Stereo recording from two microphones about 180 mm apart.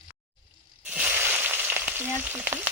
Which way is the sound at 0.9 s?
10° right (ahead or behind).